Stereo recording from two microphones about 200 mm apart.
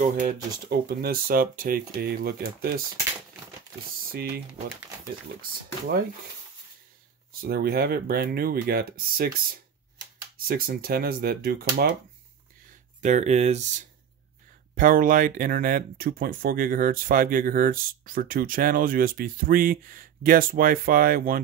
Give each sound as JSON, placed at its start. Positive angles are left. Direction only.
{"t": 0.0, "sound": "speech", "side_deg": -40}
{"t": 4.1, "sound": "speech", "side_deg": -50}
{"t": 7.3, "sound": "speech", "side_deg": -50}
{"t": 13.0, "sound": "speech", "side_deg": -35}